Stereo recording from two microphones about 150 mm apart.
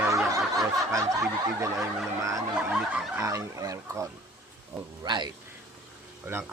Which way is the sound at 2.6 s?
10° right (ahead or behind).